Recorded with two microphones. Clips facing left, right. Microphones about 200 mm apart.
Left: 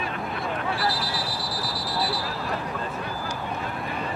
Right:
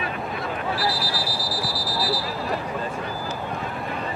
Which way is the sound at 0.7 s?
Centre (ahead or behind).